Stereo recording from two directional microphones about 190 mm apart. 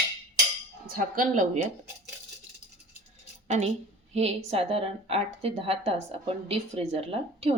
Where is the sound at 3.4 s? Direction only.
35° right (ahead or behind).